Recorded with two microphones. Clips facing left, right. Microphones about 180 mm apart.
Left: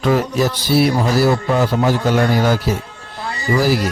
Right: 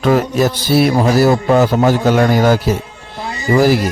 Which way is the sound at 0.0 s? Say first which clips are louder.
Right 3 dB; 50° right (ahead or behind).